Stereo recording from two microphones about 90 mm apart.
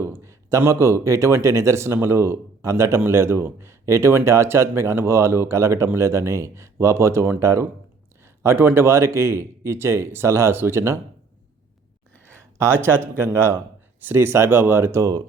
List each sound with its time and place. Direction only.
0.0 s a man's voice: 30° right (ahead or behind)
12.4 s speech: 30° right (ahead or behind)